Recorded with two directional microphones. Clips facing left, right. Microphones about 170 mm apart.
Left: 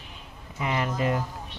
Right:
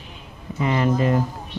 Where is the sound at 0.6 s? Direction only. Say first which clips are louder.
Right 7 dB; 10° left (ahead or behind).